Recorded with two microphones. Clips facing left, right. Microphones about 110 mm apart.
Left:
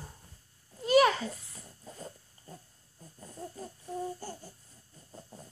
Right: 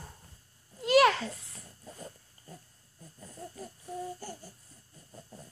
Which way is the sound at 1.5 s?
25° left (ahead or behind).